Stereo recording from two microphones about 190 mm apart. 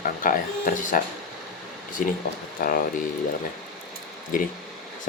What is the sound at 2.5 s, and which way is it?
Speech, 50° left (ahead or behind).